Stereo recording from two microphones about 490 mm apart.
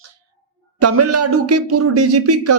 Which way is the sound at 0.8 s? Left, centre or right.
Right.